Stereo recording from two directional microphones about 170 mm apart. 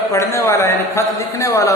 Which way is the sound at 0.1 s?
15° left (ahead or behind).